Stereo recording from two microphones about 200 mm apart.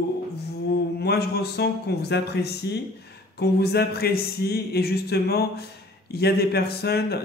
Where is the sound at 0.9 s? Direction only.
55° left (ahead or behind).